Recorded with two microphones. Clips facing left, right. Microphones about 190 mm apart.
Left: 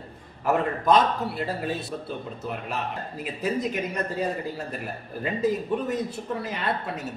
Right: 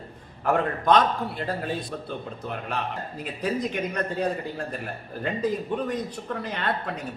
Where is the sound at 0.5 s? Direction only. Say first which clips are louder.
Even; 5° left (ahead or behind).